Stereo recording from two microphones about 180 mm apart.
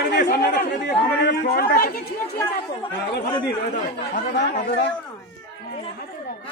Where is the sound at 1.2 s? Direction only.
60° left (ahead or behind).